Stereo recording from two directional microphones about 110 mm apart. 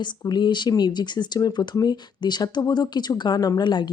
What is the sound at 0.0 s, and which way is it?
Speech, 40° left (ahead or behind).